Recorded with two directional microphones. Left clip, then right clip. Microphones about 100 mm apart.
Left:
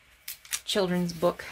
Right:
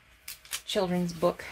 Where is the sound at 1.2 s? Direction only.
15° left (ahead or behind).